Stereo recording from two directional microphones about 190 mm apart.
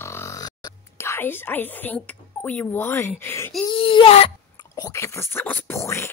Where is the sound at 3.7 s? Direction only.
25° left (ahead or behind).